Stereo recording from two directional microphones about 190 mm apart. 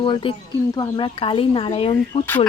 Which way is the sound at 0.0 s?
25° left (ahead or behind).